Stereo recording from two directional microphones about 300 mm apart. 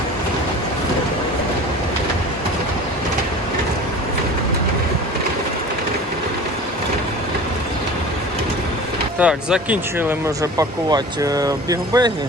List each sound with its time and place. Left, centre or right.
9.1 s speech: centre